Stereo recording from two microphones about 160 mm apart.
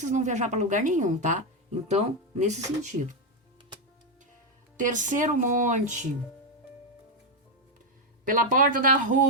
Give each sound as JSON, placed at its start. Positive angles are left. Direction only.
{"t": 0.0, "sound": "a woman's voice", "side_deg": -50}
{"t": 4.8, "sound": "a woman's voice", "side_deg": -50}
{"t": 8.3, "sound": "speech", "side_deg": -55}